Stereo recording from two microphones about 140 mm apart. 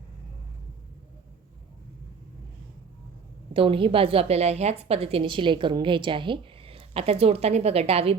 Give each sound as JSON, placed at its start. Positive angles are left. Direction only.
{"t": 3.5, "sound": "a woman's voice", "side_deg": -40}